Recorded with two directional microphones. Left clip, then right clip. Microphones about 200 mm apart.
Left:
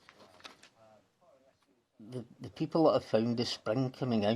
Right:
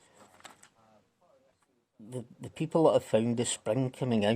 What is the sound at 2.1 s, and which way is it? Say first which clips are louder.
Speech: right 3 dB; 35° right (ahead or behind).